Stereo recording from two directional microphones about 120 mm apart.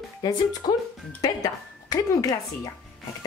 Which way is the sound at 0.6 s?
45° left (ahead or behind).